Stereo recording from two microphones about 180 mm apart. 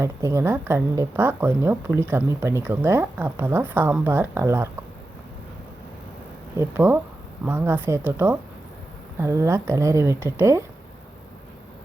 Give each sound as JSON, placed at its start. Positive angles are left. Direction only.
{"t": 0.0, "sound": "speech", "side_deg": -15}
{"t": 6.6, "sound": "speech", "side_deg": -10}